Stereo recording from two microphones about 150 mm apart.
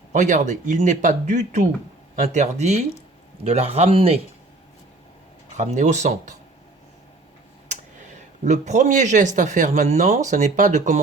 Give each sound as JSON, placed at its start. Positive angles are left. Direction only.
{"t": 0.1, "sound": "speech", "side_deg": -55}
{"t": 5.5, "sound": "speech", "side_deg": -55}
{"t": 8.4, "sound": "speech", "side_deg": -50}